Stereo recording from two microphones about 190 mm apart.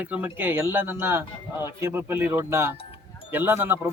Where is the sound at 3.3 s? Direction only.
10° right (ahead or behind).